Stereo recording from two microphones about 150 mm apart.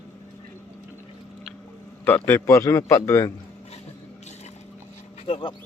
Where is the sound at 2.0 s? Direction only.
15° left (ahead or behind).